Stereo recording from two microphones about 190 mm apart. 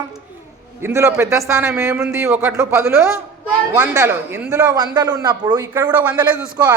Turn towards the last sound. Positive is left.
turn(degrees=-15)  # may be behind; listen again after turning